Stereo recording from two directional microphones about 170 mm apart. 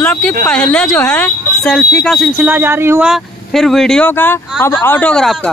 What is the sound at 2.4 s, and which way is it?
Speech, 10° right (ahead or behind).